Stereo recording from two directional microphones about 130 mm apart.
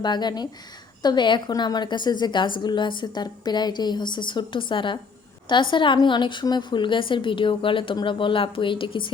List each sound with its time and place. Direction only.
0.0 s a woman's voice: 35° left (ahead or behind)